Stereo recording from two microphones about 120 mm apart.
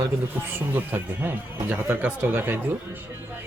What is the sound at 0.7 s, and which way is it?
Speech, 15° right (ahead or behind).